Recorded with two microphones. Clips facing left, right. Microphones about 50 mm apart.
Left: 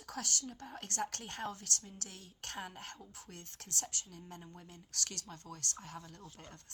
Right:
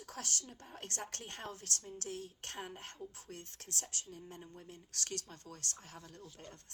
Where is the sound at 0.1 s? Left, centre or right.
Right.